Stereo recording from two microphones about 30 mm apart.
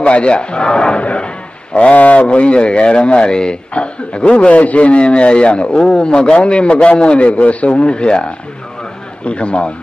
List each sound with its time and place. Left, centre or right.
0.0 s a man's voice: left
1.0 s a sound: left
2.0 s a man's voice: left
3.7 s a man's voice: left